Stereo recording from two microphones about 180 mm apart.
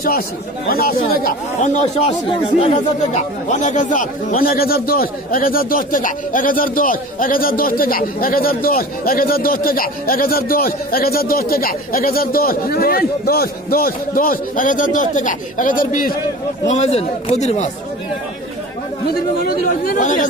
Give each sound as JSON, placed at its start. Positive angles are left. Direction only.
{"t": 0.7, "sound": "speech", "side_deg": 55}
{"t": 16.6, "sound": "a man's voice", "side_deg": 40}
{"t": 19.0, "sound": "speech", "side_deg": 55}